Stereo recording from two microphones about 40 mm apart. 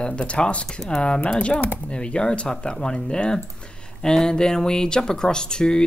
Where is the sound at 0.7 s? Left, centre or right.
Centre.